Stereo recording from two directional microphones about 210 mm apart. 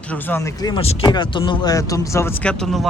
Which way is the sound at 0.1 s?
10° left (ahead or behind).